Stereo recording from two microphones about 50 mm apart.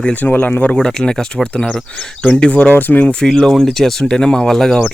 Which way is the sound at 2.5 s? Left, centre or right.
Left.